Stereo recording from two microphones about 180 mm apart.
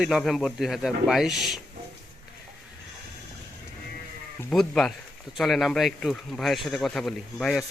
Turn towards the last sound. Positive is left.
turn(degrees=0)  # may be behind; listen again after turning